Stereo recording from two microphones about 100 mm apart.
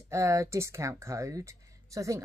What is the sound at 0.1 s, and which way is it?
Speech, 30° right (ahead or behind).